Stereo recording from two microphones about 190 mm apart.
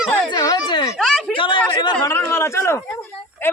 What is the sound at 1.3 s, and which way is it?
Speech, 25° left (ahead or behind).